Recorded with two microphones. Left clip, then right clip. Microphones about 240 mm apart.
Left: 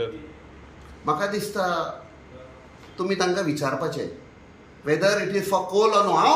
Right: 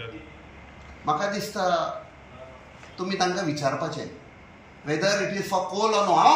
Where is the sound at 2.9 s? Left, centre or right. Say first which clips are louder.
Left 2 dB; centre.